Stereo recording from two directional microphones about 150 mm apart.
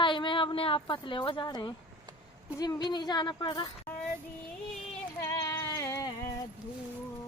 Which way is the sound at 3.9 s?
10° left (ahead or behind).